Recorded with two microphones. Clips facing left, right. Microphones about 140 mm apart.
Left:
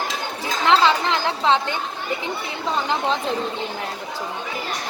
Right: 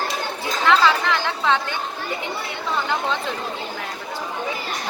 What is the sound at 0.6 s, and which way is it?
Speech, 25° left (ahead or behind).